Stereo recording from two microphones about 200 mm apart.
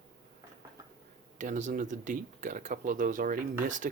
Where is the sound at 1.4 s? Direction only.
40° right (ahead or behind).